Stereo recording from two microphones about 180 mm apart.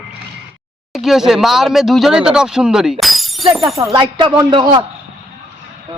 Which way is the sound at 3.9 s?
30° right (ahead or behind).